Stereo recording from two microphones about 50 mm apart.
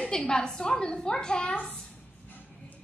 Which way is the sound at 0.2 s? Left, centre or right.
Centre.